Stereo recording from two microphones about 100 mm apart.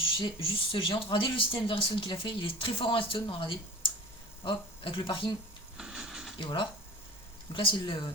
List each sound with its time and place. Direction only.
0.0 s speech: 60° left (ahead or behind)
5.7 s a sound: 5° right (ahead or behind)
7.5 s speech: 55° left (ahead or behind)